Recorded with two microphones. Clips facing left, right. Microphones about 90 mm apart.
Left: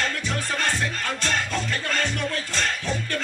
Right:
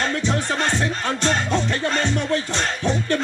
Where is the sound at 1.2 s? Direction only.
20° right (ahead or behind).